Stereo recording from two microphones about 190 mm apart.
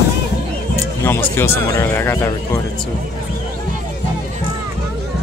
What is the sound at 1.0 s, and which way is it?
Speech, 10° left (ahead or behind).